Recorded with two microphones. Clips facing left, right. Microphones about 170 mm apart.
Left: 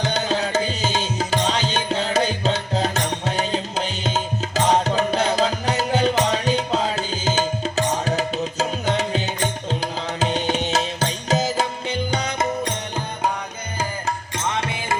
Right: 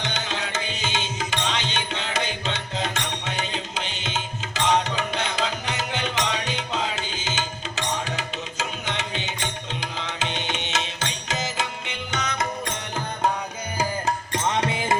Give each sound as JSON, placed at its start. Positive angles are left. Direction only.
{"t": 0.0, "sound": "music", "side_deg": 40}
{"t": 14.6, "sound": "music", "side_deg": -20}